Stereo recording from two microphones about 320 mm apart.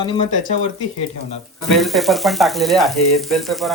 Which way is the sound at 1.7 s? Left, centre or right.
Centre.